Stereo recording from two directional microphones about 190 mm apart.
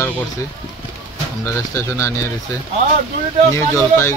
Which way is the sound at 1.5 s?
15° left (ahead or behind).